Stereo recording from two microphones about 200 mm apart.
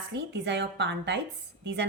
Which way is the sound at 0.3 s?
60° right (ahead or behind).